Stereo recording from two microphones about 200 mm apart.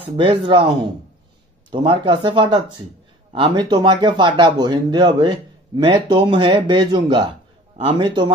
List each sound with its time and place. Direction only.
0.0 s speech: 25° right (ahead or behind)
1.7 s speech: 25° right (ahead or behind)